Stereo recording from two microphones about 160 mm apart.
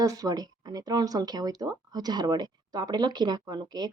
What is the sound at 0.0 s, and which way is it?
Speech, 20° right (ahead or behind).